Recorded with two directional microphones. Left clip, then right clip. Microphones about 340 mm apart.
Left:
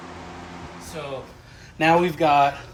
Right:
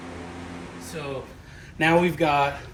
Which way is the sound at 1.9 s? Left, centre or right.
Left.